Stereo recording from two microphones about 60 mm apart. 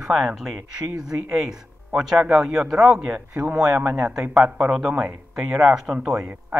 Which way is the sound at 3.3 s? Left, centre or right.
Right.